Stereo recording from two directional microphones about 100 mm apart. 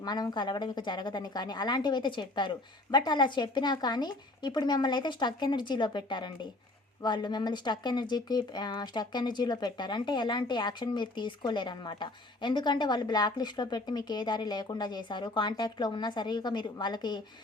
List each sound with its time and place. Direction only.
0.0 s speech: 45° left (ahead or behind)